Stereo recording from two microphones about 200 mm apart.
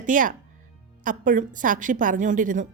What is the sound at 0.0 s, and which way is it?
A woman's voice, 40° right (ahead or behind).